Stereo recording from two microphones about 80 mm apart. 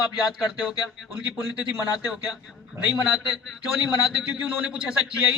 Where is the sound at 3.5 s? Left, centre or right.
Centre.